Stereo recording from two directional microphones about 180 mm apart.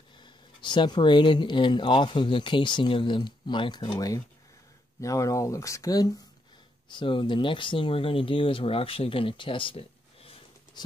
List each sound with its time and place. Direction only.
0.2 s speech: 25° left (ahead or behind)